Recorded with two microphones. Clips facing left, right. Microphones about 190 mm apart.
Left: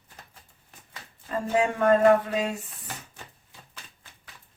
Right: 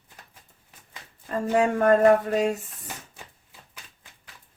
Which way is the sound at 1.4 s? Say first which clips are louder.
Right 2 dB; 45° right (ahead or behind).